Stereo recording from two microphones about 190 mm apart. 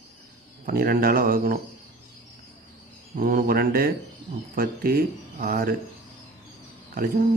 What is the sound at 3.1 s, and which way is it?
Speech, 50° right (ahead or behind).